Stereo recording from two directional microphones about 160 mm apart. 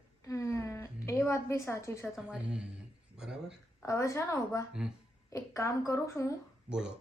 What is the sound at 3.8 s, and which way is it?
A woman's voice, 20° left (ahead or behind).